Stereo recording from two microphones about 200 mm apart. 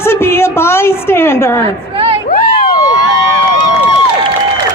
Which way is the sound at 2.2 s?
45° left (ahead or behind).